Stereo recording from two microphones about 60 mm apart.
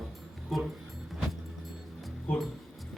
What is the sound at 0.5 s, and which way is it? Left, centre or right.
Speech, centre.